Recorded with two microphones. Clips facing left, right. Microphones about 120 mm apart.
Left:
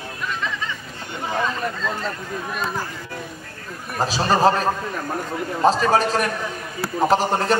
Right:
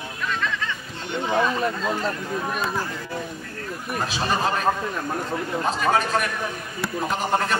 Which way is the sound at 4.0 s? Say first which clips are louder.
Left 7 dB; 35° left (ahead or behind).